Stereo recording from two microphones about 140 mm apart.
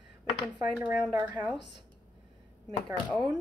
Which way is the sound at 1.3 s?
10° left (ahead or behind).